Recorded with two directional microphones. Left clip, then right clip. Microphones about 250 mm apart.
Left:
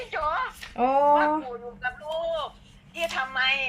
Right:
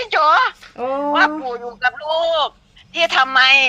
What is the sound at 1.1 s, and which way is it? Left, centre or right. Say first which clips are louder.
A man's voice: right 6 dB; right.